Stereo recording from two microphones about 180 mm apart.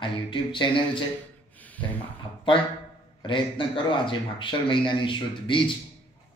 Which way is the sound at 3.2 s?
25° left (ahead or behind).